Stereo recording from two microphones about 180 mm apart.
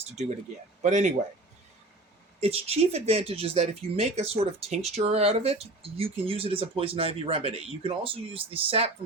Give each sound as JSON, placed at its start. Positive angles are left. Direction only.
{"t": 0.0, "sound": "speech", "side_deg": -40}
{"t": 2.4, "sound": "speech", "side_deg": -35}